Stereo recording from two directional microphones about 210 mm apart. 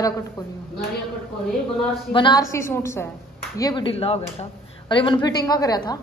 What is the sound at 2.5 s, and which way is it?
A woman's voice, 15° left (ahead or behind).